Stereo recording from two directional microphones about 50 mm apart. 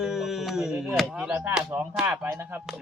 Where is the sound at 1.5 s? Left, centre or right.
Centre.